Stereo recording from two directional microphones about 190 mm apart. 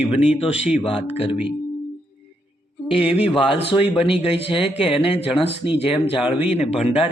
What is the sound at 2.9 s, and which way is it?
Speech, 30° left (ahead or behind).